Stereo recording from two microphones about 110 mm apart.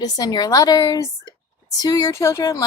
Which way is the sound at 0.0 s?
35° left (ahead or behind).